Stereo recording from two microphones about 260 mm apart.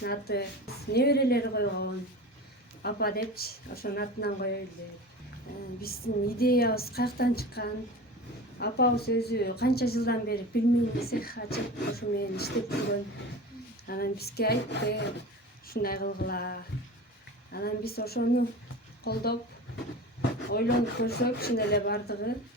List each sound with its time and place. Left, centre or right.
0.0 s a woman's voice: left
5.8 s a woman's voice: left
13.8 s a woman's voice: left
20.5 s a woman's voice: left